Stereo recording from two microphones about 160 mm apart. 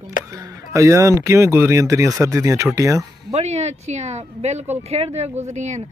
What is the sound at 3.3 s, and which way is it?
Speech, 45° right (ahead or behind).